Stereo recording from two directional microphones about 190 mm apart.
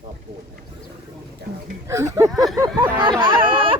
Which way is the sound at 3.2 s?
25° right (ahead or behind).